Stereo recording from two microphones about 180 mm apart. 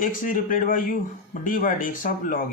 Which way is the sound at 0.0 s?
50° left (ahead or behind).